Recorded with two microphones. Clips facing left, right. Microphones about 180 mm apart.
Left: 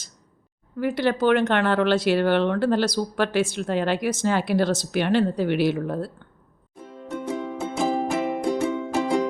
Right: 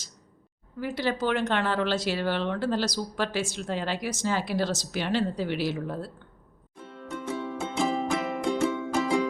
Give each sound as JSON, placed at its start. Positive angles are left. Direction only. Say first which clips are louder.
{"t": 0.8, "sound": "speech", "louder": "left 6 dB", "side_deg": 60}
{"t": 7.1, "sound": "music", "louder": "left 4 dB", "side_deg": 30}
{"t": 7.3, "sound": "music", "louder": "left 3 dB", "side_deg": 15}
{"t": 7.9, "sound": "music", "louder": "left 6 dB", "side_deg": 35}
{"t": 8.4, "sound": "music", "louder": "left 2 dB", "side_deg": 15}